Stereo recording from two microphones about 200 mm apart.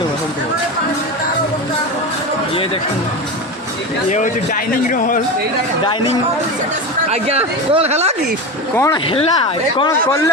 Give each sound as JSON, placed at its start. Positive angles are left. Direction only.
{"t": 4.1, "sound": "speech", "side_deg": 40}
{"t": 5.8, "sound": "speech", "side_deg": 25}
{"t": 7.1, "sound": "speech", "side_deg": -30}
{"t": 8.7, "sound": "speech", "side_deg": 15}
{"t": 9.0, "sound": "speech", "side_deg": 30}